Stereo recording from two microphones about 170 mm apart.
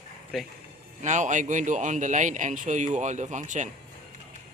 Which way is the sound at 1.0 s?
45° right (ahead or behind).